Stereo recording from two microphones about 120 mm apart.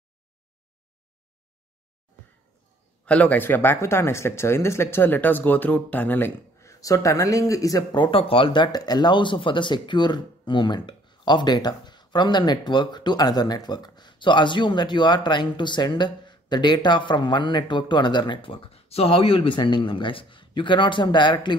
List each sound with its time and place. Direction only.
3.1 s speech: 10° left (ahead or behind); by 8.0 s 30° left (ahead or behind)
8.0 s speech: 50° left (ahead or behind)
8.7 s speech: 35° left (ahead or behind)